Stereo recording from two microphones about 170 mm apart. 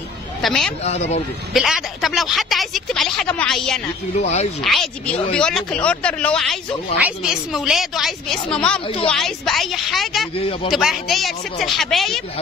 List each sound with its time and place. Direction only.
0.4 s speech: 5° left (ahead or behind)
4.2 s a man's voice: 40° left (ahead or behind)
4.6 s speech: centre (ahead or behind)
10.3 s a man's voice: 35° left (ahead or behind)
10.7 s speech: centre (ahead or behind)